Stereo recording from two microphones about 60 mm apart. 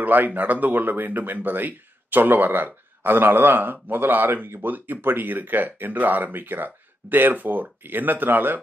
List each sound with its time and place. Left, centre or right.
0.0 s speech: right